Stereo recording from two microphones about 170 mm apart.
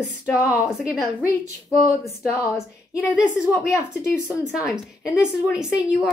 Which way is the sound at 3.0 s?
5° right (ahead or behind).